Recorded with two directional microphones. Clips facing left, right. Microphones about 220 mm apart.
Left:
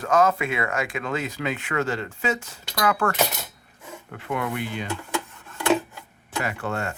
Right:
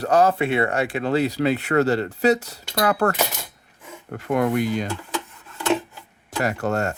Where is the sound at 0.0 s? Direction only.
35° right (ahead or behind).